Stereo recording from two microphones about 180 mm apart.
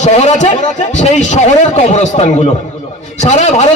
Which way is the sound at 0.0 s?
40° left (ahead or behind).